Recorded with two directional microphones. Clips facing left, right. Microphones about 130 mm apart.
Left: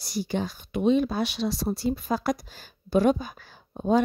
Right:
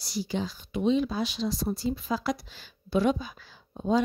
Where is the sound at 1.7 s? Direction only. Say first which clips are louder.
Left 3 dB; 55° left (ahead or behind).